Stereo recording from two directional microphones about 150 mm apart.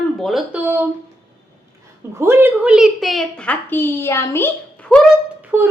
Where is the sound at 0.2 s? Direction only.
Centre (ahead or behind).